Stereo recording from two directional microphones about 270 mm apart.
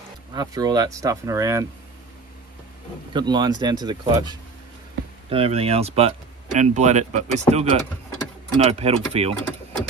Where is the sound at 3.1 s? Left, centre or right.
Centre.